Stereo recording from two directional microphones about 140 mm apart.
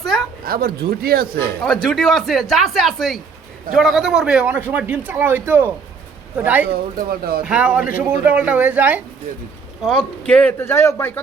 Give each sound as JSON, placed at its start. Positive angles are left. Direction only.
{"t": 0.4, "sound": "speech", "side_deg": -90}
{"t": 1.6, "sound": "a man's voice", "side_deg": 5}
{"t": 6.7, "sound": "speech", "side_deg": -90}
{"t": 7.4, "sound": "a man's voice", "side_deg": -10}
{"t": 9.8, "sound": "speech", "side_deg": 5}